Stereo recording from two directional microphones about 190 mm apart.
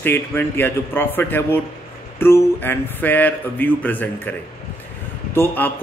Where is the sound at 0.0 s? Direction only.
10° left (ahead or behind).